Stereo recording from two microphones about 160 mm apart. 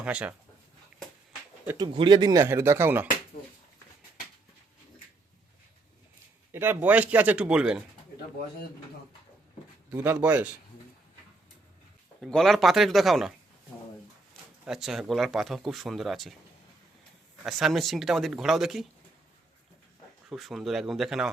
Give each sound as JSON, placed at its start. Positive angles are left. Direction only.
{"t": 0.0, "sound": "speech", "side_deg": -10}
{"t": 1.8, "sound": "speech", "side_deg": -30}
{"t": 6.5, "sound": "speech", "side_deg": -15}
{"t": 9.9, "sound": "speech", "side_deg": -10}
{"t": 12.2, "sound": "speech", "side_deg": 0}
{"t": 14.6, "sound": "speech", "side_deg": -5}
{"t": 17.4, "sound": "speech", "side_deg": 0}
{"t": 20.3, "sound": "speech", "side_deg": 0}